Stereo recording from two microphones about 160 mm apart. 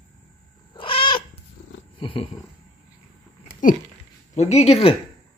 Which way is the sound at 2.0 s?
35° left (ahead or behind).